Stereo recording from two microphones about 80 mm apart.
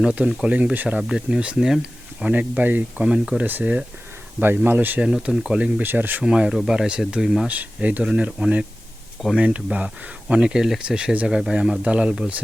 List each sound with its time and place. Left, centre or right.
0.0 s speech: centre
5.0 s speech: centre
5.8 s speech: right
6.2 s speech: centre
7.4 s speech: centre